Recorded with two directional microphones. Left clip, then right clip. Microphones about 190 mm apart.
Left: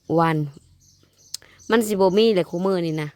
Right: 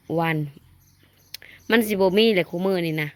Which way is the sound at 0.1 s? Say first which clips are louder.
Left 4 dB; 30° left (ahead or behind).